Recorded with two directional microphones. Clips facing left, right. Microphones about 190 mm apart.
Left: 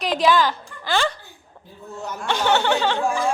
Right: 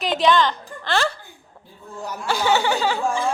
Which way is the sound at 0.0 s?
Centre (ahead or behind).